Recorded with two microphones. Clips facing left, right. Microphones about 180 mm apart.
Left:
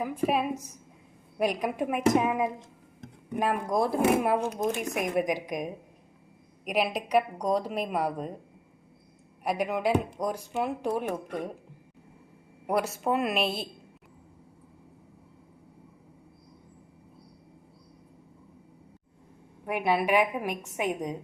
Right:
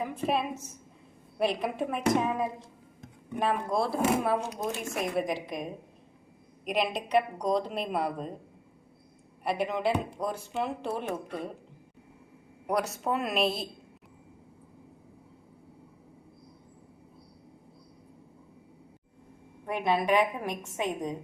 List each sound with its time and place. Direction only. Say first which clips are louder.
0.0 s speech: left 2 dB; 10° left (ahead or behind)
6.7 s speech: left 1 dB; 10° left (ahead or behind)
9.4 s speech: left 1 dB; 10° left (ahead or behind)
13.1 s a woman's voice: left 1 dB; centre (ahead or behind)
19.6 s speech: left 1 dB; 10° left (ahead or behind)